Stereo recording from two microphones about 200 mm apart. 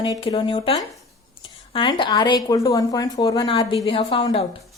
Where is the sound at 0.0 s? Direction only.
25° left (ahead or behind).